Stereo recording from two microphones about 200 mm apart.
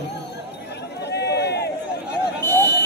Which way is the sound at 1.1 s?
55° left (ahead or behind).